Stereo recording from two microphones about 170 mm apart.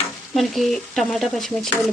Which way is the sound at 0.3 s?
Centre (ahead or behind).